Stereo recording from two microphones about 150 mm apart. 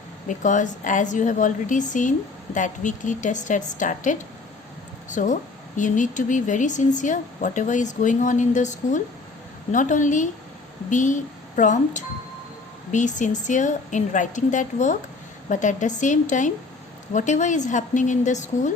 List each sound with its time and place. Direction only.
0.3 s speech: 55° left (ahead or behind)